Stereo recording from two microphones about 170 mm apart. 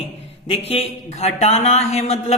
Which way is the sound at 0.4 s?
35° left (ahead or behind).